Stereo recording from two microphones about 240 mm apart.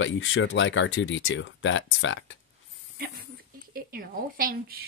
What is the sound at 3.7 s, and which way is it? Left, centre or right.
A woman's voice, right.